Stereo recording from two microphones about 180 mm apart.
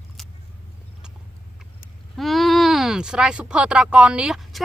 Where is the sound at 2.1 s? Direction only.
Centre (ahead or behind).